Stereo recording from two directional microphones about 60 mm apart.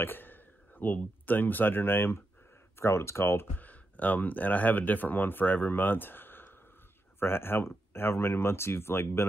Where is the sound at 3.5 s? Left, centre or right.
Left.